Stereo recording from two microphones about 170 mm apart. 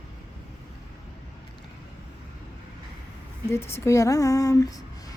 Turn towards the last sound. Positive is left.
turn(degrees=20)  # may be behind; listen again after turning